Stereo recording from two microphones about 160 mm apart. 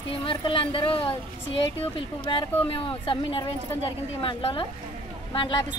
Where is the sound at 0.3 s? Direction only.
30° left (ahead or behind).